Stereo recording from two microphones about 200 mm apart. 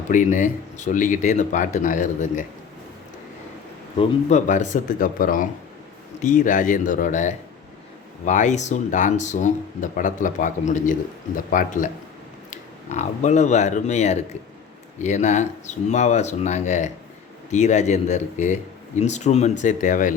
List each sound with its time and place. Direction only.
0.1 s speech: 40° left (ahead or behind)
3.9 s speech: 35° left (ahead or behind)